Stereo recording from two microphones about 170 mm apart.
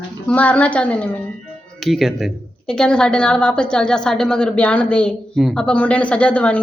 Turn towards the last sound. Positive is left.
turn(degrees=5)  # may be behind; listen again after turning